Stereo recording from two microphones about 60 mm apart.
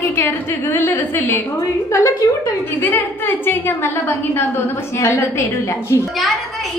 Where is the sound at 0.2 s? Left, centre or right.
Left.